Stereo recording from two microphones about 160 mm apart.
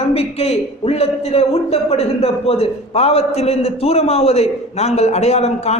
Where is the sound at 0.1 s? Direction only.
40° left (ahead or behind).